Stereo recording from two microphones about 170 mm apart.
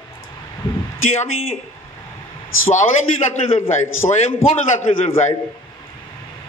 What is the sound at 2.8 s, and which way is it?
A man's voice, 40° left (ahead or behind).